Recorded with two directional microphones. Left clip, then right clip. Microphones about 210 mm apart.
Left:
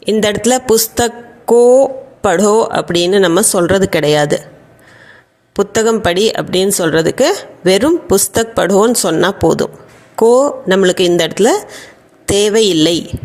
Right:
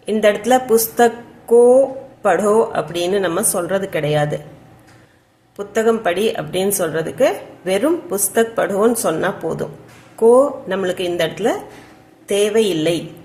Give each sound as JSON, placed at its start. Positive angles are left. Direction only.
{"t": 0.0, "sound": "speech", "side_deg": 45}
{"t": 5.5, "sound": "speech", "side_deg": 40}